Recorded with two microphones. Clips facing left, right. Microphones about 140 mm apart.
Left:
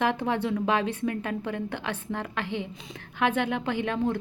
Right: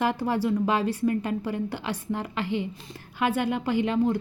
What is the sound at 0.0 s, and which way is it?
A woman's voice, 5° right (ahead or behind).